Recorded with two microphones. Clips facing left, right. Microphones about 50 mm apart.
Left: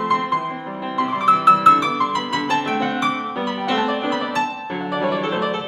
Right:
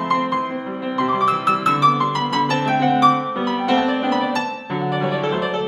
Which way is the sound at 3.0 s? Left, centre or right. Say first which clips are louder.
Right 7 dB; left.